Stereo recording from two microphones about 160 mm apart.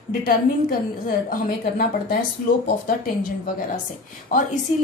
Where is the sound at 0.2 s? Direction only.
60° left (ahead or behind).